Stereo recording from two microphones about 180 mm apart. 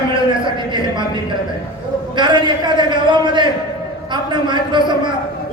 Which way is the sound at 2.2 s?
25° right (ahead or behind).